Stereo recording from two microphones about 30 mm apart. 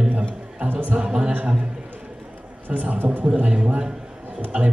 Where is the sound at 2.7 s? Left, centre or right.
Right.